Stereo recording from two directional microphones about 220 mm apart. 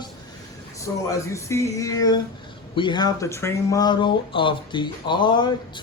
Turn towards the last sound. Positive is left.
turn(degrees=20)  # may be behind; listen again after turning